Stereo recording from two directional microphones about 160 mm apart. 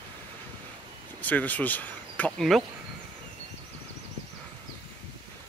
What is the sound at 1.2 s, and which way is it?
Speech, 10° left (ahead or behind).